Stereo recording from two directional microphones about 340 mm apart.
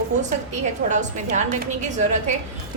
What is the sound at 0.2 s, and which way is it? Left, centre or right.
A woman's voice, right.